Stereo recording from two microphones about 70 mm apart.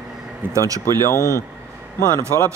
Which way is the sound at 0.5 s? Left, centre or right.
Right.